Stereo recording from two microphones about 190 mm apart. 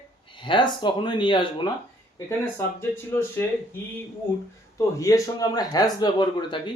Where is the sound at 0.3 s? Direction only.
25° left (ahead or behind).